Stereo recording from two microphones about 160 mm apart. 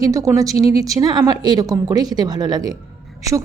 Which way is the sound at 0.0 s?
20° right (ahead or behind).